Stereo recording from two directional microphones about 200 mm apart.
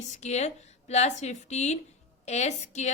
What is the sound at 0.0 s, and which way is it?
A woman's voice, 35° left (ahead or behind).